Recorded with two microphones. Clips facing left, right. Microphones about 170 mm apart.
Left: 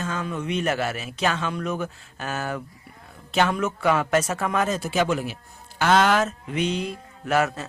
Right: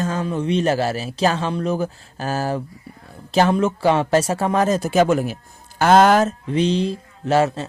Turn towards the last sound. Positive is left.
turn(degrees=-30)  # may be behind; listen again after turning